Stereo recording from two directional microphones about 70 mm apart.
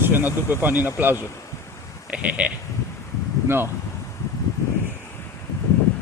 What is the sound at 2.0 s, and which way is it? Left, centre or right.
Speech, centre.